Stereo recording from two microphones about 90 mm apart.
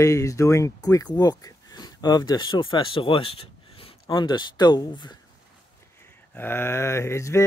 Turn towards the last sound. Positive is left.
turn(degrees=30)  # may be behind; listen again after turning